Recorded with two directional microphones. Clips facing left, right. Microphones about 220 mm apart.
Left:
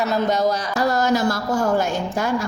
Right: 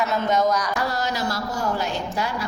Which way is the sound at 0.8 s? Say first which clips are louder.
Left 7 dB; 45° left (ahead or behind).